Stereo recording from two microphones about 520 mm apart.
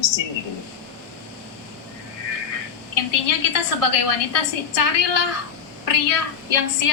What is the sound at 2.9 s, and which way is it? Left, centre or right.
A woman's voice, left.